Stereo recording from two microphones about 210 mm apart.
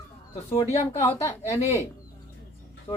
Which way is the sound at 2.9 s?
25° left (ahead or behind).